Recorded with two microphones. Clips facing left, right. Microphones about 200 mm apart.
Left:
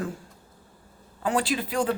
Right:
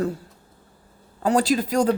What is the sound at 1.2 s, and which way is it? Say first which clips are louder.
Speech: right 6 dB; 40° right (ahead or behind).